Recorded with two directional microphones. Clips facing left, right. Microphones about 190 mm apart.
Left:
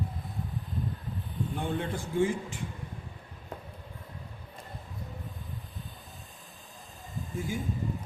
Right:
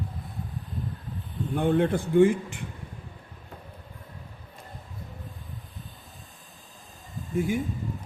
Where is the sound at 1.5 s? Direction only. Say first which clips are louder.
Right 11 dB; 60° right (ahead or behind).